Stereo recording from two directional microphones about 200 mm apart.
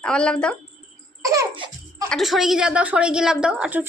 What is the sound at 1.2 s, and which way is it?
Laughter, 15° right (ahead or behind).